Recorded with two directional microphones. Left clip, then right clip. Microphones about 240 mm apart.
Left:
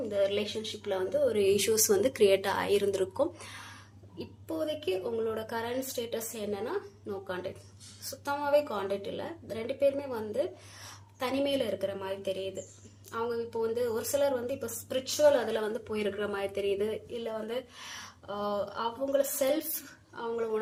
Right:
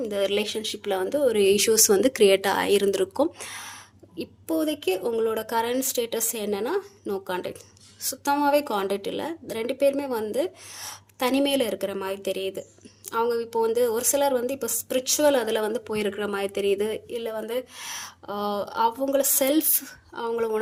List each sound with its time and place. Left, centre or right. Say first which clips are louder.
0.1 s a woman's voice: right 3 dB; right